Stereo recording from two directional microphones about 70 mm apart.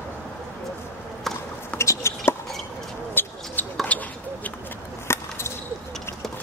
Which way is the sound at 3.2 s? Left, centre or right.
Left.